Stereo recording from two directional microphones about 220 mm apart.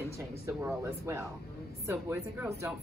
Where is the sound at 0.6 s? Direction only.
15° right (ahead or behind).